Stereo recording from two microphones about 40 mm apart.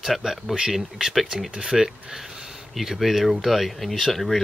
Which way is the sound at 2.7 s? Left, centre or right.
Centre.